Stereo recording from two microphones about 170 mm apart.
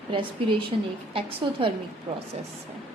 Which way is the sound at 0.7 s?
35° right (ahead or behind).